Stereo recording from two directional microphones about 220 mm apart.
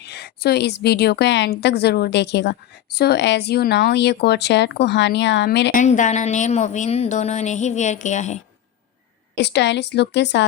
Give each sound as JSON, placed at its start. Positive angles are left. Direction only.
{"t": 0.0, "sound": "a woman's voice", "side_deg": 50}
{"t": 5.8, "sound": "a woman's voice", "side_deg": 35}
{"t": 9.4, "sound": "a woman's voice", "side_deg": 50}